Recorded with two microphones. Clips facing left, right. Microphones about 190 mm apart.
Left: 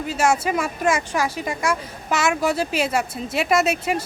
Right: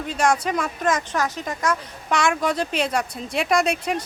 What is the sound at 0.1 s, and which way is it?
Speech, 5° left (ahead or behind).